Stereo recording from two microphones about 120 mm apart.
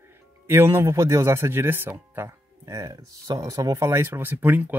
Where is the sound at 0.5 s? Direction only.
20° right (ahead or behind).